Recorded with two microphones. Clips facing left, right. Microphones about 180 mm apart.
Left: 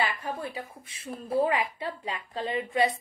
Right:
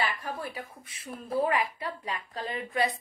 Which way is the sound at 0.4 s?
25° left (ahead or behind).